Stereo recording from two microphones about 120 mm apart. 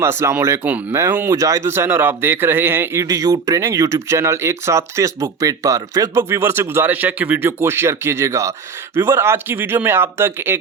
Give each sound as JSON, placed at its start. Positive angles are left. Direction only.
{"t": 0.0, "sound": "speech", "side_deg": -20}